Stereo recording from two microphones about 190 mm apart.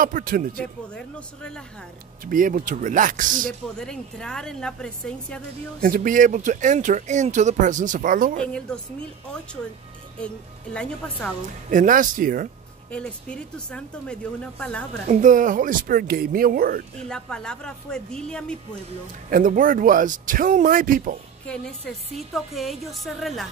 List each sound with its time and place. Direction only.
0.0 s speech: 45° right (ahead or behind)
0.6 s a woman's voice: 5° left (ahead or behind)
2.2 s speech: 45° right (ahead or behind)
3.7 s a woman's voice: 5° left (ahead or behind)
5.8 s speech: 50° right (ahead or behind)
8.4 s a woman's voice: 5° left (ahead or behind)
10.2 s a woman's voice: 5° left (ahead or behind)
11.7 s speech: 45° right (ahead or behind)
12.9 s a woman's voice: 5° left (ahead or behind)
15.0 s speech: 40° right (ahead or behind)
17.1 s a woman's voice: 5° left (ahead or behind)
19.3 s speech: 45° right (ahead or behind)
21.5 s a woman's voice: 5° left (ahead or behind)